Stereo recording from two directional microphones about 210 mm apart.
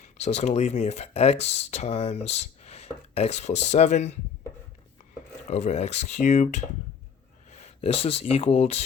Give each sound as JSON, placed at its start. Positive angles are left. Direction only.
{"t": 0.2, "sound": "speech", "side_deg": 30}
{"t": 5.5, "sound": "speech", "side_deg": 30}